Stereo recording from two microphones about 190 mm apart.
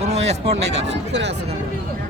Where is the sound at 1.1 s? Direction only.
65° right (ahead or behind).